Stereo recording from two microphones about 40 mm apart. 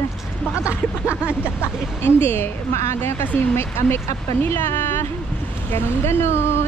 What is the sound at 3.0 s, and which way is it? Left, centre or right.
Speech, left.